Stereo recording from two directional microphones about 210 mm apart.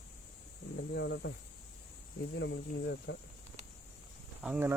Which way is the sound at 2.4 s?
55° left (ahead or behind).